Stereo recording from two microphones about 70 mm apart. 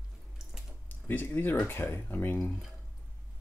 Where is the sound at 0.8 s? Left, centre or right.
Left.